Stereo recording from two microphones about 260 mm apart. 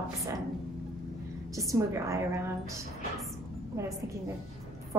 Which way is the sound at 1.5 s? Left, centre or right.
Centre.